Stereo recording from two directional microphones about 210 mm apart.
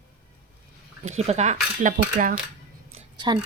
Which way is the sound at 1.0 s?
30° right (ahead or behind).